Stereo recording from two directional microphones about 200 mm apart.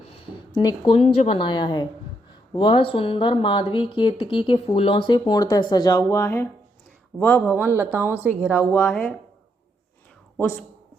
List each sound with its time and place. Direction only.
0.1 s a man's voice: 25° left (ahead or behind)
7.6 s speech: 10° right (ahead or behind)
8.5 s a man's voice: 10° left (ahead or behind)